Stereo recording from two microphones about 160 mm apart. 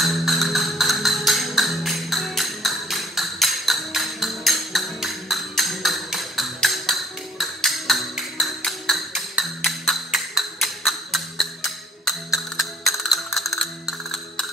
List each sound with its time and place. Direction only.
0.0 s music: centre (ahead or behind)